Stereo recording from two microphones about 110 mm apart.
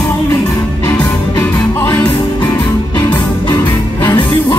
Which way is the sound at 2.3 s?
35° left (ahead or behind).